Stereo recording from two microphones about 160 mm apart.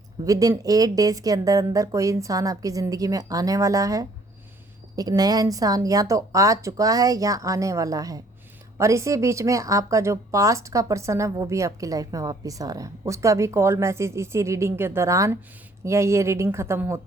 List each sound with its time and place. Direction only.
0.3 s a woman's voice: 20° right (ahead or behind)